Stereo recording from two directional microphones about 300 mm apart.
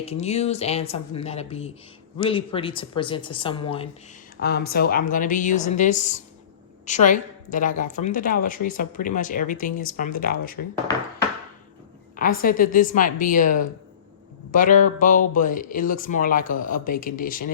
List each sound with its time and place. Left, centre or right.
0.0 s speech: left
4.4 s speech: left
12.1 s speech: left